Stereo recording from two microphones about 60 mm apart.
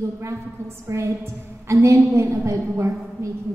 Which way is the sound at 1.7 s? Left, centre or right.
Right.